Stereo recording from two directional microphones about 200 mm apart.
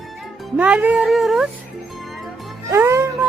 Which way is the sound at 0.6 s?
10° right (ahead or behind).